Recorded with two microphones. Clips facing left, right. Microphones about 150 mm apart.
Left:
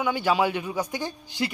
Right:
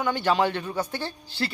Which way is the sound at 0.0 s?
10° left (ahead or behind).